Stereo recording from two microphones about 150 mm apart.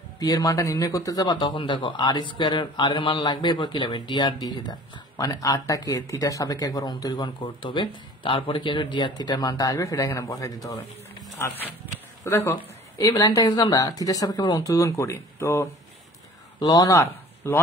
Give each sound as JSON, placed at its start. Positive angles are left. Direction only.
{"t": 0.2, "sound": "a man's voice", "side_deg": 25}